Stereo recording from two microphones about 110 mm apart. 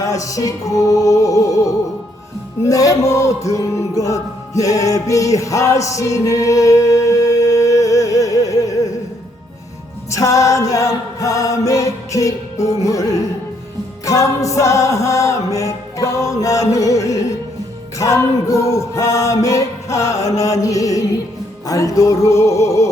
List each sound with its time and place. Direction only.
0.0 s music: 30° left (ahead or behind)
10.1 s music: 30° left (ahead or behind)